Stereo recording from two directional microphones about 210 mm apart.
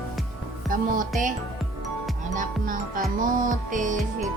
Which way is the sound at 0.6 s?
40° right (ahead or behind).